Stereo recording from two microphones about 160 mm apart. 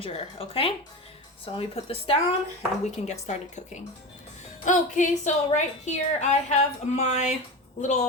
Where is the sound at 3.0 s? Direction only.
45° left (ahead or behind).